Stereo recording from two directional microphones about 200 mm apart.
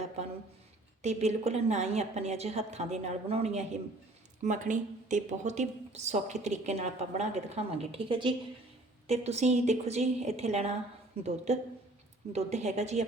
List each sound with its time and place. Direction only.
1.0 s speech: 35° right (ahead or behind)